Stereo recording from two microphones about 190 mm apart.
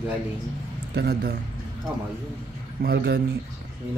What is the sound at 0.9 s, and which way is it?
Speech, 55° right (ahead or behind).